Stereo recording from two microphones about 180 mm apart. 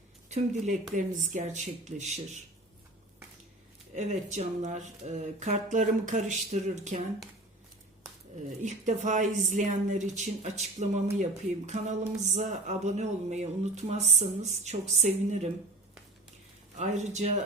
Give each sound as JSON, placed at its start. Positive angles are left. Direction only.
{"t": 0.3, "sound": "speech", "side_deg": -40}
{"t": 3.9, "sound": "speech", "side_deg": -40}
{"t": 8.6, "sound": "speech", "side_deg": -45}
{"t": 16.7, "sound": "speech", "side_deg": -40}